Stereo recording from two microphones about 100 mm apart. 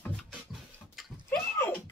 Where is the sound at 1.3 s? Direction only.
15° left (ahead or behind).